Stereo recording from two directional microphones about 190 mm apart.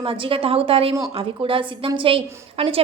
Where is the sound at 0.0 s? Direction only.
30° right (ahead or behind).